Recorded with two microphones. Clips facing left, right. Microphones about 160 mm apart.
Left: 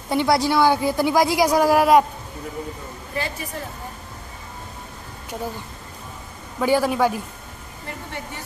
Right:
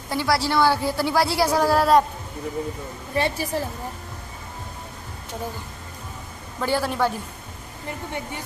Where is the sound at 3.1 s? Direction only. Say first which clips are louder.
Right 5 dB; 30° right (ahead or behind).